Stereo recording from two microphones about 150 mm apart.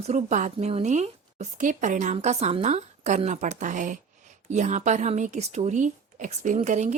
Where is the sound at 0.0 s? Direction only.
50° right (ahead or behind).